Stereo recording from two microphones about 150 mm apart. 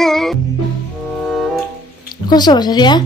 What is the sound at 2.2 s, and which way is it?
Speech, 30° left (ahead or behind).